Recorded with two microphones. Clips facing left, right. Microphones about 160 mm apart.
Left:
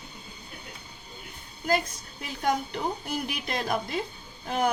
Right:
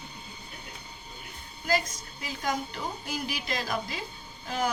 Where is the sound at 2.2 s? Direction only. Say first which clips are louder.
Left 4 dB; 60° left (ahead or behind).